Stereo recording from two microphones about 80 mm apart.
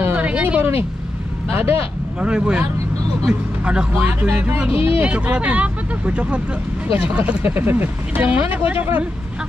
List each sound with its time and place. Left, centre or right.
0.0 s a sound: right
1.5 s speech: right
2.1 s speech: centre
3.9 s speech: right